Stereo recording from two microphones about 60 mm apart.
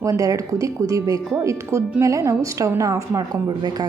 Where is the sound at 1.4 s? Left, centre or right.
Right.